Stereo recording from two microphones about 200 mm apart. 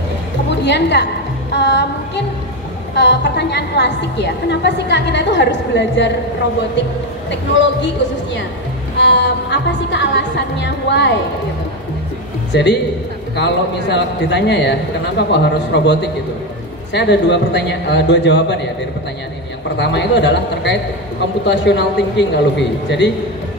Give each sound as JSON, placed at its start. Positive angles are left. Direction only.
{"t": 0.7, "sound": "a woman's voice", "side_deg": 60}
{"t": 7.2, "sound": "a woman's voice", "side_deg": 65}
{"t": 8.9, "sound": "a woman's voice", "side_deg": 60}
{"t": 12.5, "sound": "a woman's voice", "side_deg": 60}
{"t": 19.8, "sound": "a woman's voice", "side_deg": 60}